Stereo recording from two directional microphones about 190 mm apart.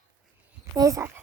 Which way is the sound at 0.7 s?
20° right (ahead or behind).